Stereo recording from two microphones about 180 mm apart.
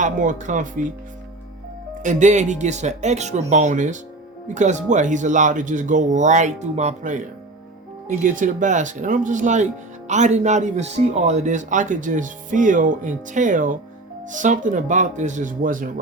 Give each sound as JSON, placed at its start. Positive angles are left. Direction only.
{"t": 0.0, "sound": "speech", "side_deg": -45}
{"t": 2.0, "sound": "speech", "side_deg": -40}